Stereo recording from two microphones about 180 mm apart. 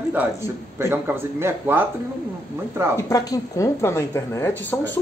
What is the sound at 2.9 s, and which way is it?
Speech, 20° left (ahead or behind).